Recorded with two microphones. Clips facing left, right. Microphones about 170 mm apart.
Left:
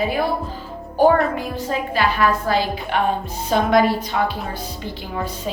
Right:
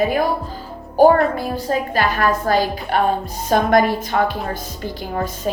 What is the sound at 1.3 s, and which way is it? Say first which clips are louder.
A woman's voice: right 3 dB; 40° right (ahead or behind).